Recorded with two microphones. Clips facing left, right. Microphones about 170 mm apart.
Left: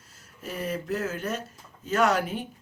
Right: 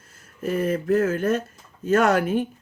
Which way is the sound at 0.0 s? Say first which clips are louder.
Right 11 dB; 50° right (ahead or behind).